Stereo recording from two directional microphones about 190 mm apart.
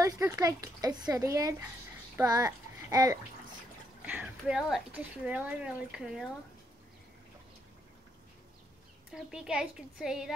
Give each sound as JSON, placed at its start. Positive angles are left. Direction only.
{"t": 0.0, "sound": "a child's voice", "side_deg": -15}
{"t": 4.0, "sound": "speech", "side_deg": -10}
{"t": 9.1, "sound": "speech", "side_deg": -5}